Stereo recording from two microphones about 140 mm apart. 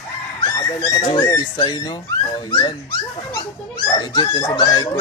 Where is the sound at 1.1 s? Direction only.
30° left (ahead or behind).